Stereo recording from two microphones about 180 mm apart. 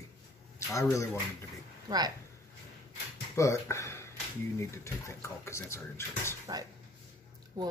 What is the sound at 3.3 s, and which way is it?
Speech, 15° left (ahead or behind).